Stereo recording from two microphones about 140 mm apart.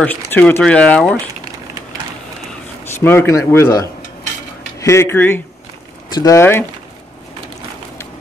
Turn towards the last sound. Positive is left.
turn(degrees=15)  # may be behind; listen again after turning